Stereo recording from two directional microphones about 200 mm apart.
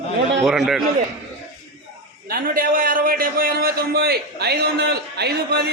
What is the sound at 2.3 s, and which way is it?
A man's voice, 45° right (ahead or behind).